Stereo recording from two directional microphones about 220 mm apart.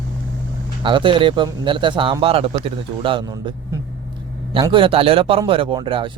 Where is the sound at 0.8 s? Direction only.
20° right (ahead or behind).